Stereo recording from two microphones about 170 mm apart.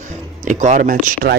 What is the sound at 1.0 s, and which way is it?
Speech, 55° right (ahead or behind).